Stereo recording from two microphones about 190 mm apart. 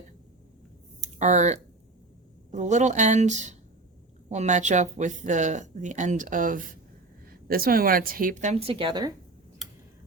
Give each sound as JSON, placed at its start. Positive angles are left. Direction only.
{"t": 1.0, "sound": "a woman's voice", "side_deg": -40}